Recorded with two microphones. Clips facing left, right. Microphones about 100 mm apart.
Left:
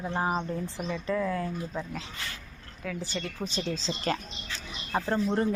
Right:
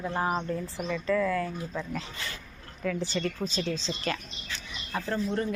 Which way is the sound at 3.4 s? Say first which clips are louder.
Right 2 dB; 15° left (ahead or behind).